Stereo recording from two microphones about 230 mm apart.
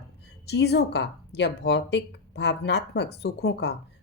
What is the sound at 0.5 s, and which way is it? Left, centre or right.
A woman's voice, left.